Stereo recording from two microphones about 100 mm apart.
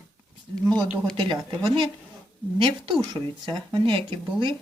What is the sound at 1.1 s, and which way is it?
Speech, 55° right (ahead or behind).